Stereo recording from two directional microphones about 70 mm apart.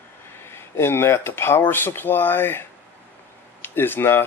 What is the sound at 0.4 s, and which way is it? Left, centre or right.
Speech, left.